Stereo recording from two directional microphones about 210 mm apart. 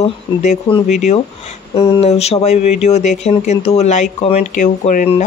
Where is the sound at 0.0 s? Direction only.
30° left (ahead or behind).